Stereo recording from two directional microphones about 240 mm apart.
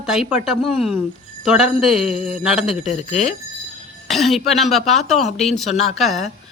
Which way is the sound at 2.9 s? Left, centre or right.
Left.